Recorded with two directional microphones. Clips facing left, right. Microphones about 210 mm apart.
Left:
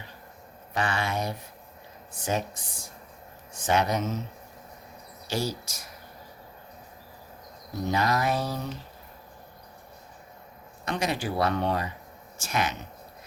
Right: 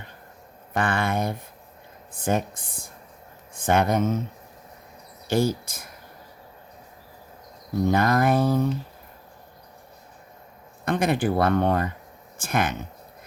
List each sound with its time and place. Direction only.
0.7 s speech: 55° right (ahead or behind)
5.3 s speech: 55° right (ahead or behind)
7.9 s speech: 55° right (ahead or behind)
10.8 s speech: 55° right (ahead or behind)